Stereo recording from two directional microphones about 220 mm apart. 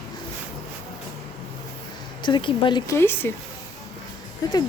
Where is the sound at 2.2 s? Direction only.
20° left (ahead or behind).